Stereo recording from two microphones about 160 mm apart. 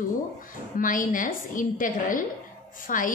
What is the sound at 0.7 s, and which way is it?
A woman's voice, 55° left (ahead or behind).